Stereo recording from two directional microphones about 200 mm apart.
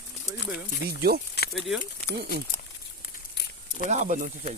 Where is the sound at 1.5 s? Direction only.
5° right (ahead or behind).